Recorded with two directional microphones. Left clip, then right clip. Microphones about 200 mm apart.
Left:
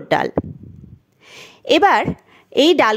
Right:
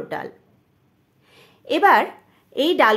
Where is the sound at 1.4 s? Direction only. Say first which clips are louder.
Left 6 dB; 40° left (ahead or behind).